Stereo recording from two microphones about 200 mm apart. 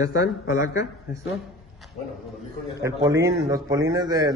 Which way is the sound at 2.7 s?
15° right (ahead or behind).